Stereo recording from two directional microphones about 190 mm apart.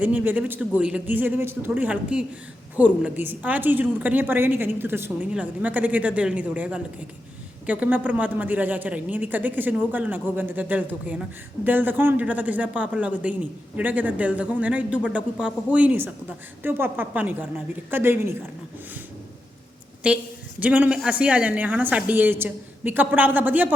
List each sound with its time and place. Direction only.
0.0 s a woman's voice: 10° right (ahead or behind)
20.0 s a woman's voice: 5° right (ahead or behind)